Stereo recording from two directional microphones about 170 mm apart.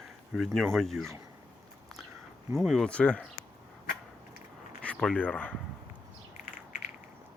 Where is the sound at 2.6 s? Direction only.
Centre (ahead or behind).